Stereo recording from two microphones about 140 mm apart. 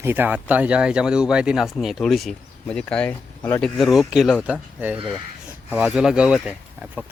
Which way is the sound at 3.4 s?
20° left (ahead or behind).